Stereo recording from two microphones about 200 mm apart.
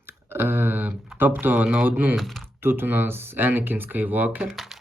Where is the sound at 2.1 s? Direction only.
Centre (ahead or behind).